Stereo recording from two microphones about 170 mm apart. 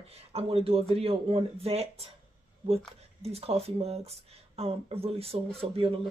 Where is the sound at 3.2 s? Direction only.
35° right (ahead or behind).